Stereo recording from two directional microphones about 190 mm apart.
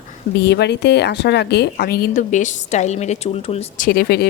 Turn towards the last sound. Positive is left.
turn(degrees=55)  # may be behind; listen again after turning